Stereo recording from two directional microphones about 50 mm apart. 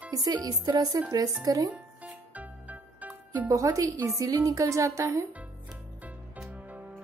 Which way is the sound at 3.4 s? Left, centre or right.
Right.